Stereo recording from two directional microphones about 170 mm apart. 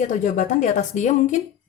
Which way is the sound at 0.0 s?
45° left (ahead or behind).